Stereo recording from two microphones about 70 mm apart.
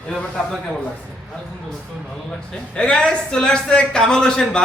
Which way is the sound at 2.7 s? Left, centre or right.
Centre.